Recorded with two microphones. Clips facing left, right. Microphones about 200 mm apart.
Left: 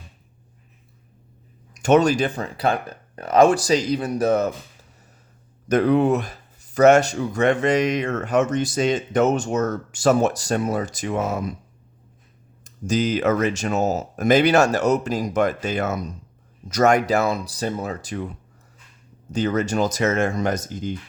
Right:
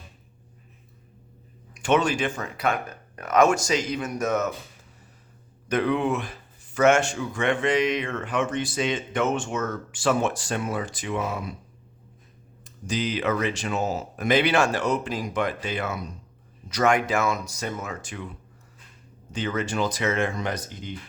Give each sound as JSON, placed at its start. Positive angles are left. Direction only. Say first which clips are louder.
{"t": 1.7, "sound": "speech", "louder": "left 6 dB", "side_deg": 40}
{"t": 5.6, "sound": "speech", "louder": "left 6 dB", "side_deg": 40}
{"t": 12.6, "sound": "speech", "louder": "left 6 dB", "side_deg": 45}
{"t": 19.3, "sound": "speech", "louder": "left 6 dB", "side_deg": 40}